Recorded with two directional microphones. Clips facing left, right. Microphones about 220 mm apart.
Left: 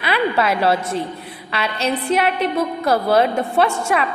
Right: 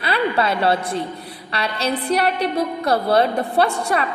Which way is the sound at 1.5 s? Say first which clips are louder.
Left 1 dB; 30° right (ahead or behind).